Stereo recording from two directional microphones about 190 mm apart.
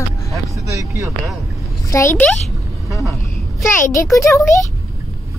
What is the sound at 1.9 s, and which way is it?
Speech, 15° left (ahead or behind).